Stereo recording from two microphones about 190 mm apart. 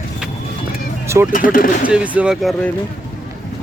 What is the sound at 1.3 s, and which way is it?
Speech, 45° left (ahead or behind).